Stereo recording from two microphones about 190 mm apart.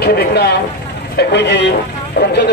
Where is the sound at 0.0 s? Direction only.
60° left (ahead or behind).